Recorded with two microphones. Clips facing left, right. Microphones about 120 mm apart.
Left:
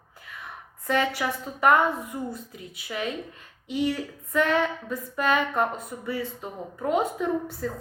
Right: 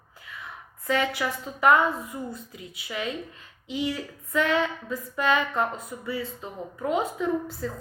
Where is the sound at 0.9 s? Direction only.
55° left (ahead or behind).